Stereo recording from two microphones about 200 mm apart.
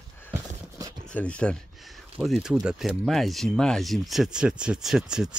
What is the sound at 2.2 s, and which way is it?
Speech, centre (ahead or behind).